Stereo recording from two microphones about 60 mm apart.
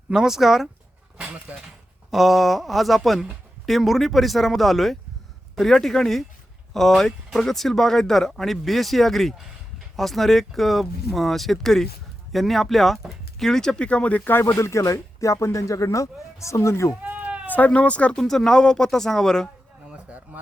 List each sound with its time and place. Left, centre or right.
0.1 s speech: centre
1.5 s speech: right
2.0 s speech: centre; by 14.2 s left
14.3 s speech: left
17.0 s sheep: right
17.5 s speech: left
18.2 s speech: centre